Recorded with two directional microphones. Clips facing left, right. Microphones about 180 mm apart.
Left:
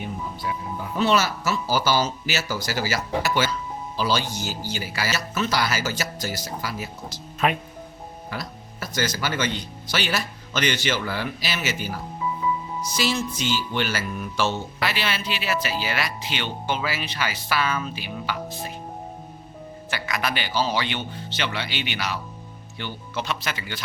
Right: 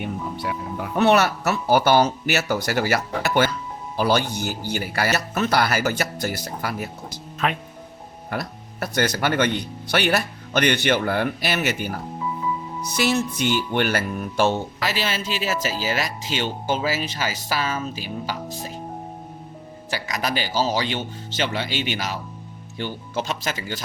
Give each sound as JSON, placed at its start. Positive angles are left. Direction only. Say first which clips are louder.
{"t": 0.0, "sound": "speech", "louder": "right 3 dB", "side_deg": -65}
{"t": 7.4, "sound": "speech", "louder": "left 2 dB", "side_deg": 10}
{"t": 8.3, "sound": "speech", "louder": "right 6 dB", "side_deg": -60}
{"t": 19.9, "sound": "speech", "louder": "right 2 dB", "side_deg": -40}